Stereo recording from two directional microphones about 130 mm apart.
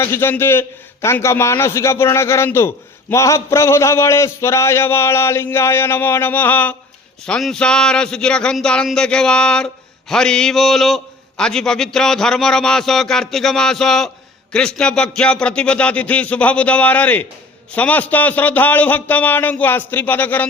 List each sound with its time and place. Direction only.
0.0 s a man's voice: 20° left (ahead or behind)